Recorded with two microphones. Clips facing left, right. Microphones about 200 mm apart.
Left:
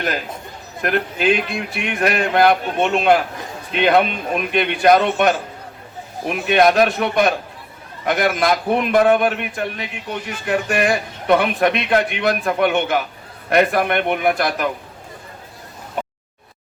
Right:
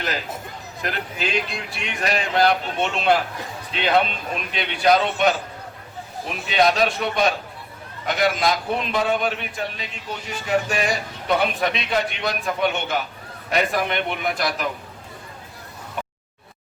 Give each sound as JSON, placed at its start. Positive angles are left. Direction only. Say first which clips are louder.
{"t": 0.8, "sound": "a man's voice", "louder": "left 8 dB", "side_deg": 55}